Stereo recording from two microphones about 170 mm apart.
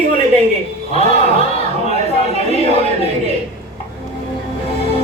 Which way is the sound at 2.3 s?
35° left (ahead or behind).